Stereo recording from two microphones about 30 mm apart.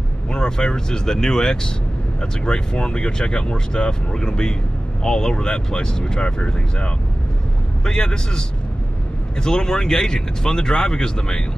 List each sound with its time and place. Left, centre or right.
0.5 s speech: centre